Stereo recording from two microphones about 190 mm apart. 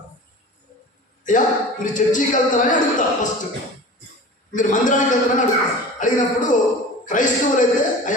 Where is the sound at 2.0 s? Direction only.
40° left (ahead or behind).